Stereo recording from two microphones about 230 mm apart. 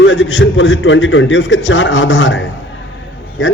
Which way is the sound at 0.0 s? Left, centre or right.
Left.